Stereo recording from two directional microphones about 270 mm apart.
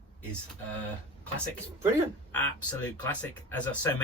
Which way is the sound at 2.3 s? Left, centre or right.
Centre.